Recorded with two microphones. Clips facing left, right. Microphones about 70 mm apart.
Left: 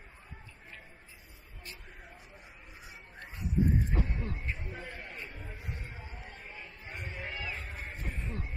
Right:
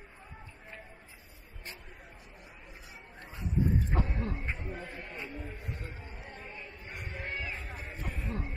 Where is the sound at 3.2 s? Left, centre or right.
Right.